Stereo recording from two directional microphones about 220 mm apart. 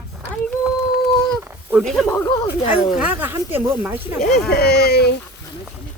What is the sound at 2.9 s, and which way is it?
Speech, 10° right (ahead or behind).